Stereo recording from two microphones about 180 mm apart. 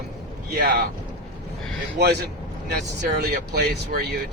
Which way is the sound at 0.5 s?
60° right (ahead or behind).